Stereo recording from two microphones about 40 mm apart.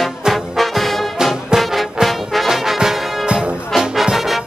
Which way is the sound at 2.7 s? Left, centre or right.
Centre.